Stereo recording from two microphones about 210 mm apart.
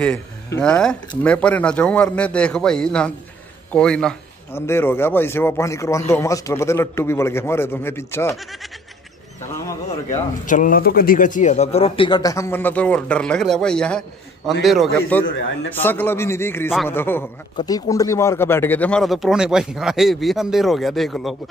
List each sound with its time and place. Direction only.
0.0 s a man's voice: 5° left (ahead or behind)
10.4 s a man's voice: 40° left (ahead or behind); by 21.4 s centre (ahead or behind)